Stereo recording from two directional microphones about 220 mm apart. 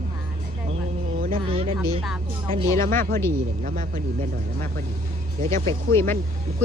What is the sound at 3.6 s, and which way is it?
Speech, 40° right (ahead or behind).